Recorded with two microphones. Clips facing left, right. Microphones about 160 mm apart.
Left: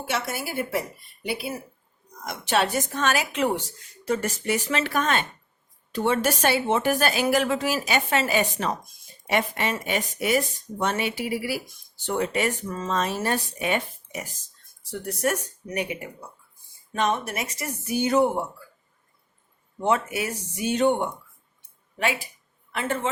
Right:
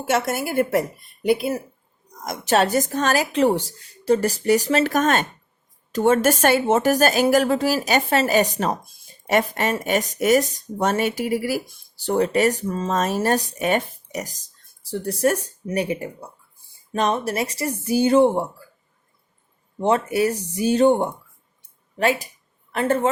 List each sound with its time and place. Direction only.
0.1 s a woman's voice: 50° right (ahead or behind); by 12.9 s 35° right (ahead or behind)
12.9 s speech: 45° right (ahead or behind); by 18.4 s 30° right (ahead or behind)
19.8 s a woman's voice: 35° right (ahead or behind)